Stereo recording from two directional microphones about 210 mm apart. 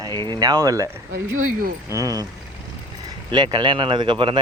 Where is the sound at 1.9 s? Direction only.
15° right (ahead or behind).